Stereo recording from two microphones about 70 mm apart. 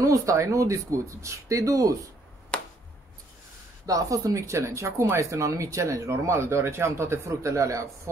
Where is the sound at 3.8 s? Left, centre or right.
Right.